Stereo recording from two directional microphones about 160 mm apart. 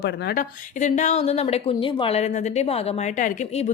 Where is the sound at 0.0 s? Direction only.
90° left.